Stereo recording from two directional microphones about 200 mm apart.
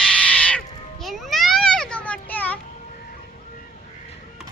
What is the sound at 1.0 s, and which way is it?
Children playing, centre (ahead or behind).